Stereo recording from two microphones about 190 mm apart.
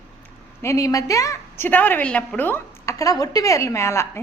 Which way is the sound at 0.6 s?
15° left (ahead or behind).